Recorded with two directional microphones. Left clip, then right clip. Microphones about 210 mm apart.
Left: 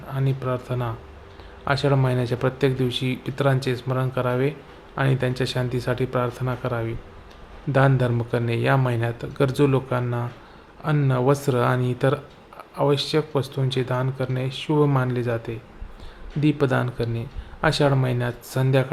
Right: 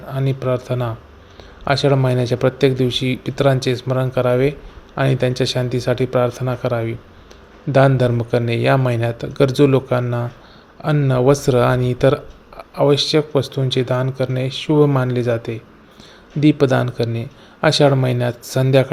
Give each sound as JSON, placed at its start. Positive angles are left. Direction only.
{"t": 0.1, "sound": "speech", "side_deg": -20}